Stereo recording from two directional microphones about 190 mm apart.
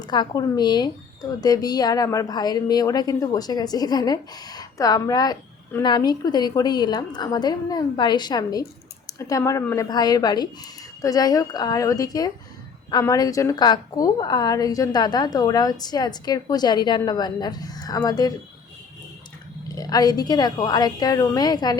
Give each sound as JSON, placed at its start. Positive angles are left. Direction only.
{"t": 0.0, "sound": "speech", "side_deg": 20}
{"t": 19.6, "sound": "speech", "side_deg": 20}